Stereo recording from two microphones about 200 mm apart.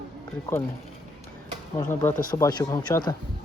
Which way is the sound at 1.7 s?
15° left (ahead or behind).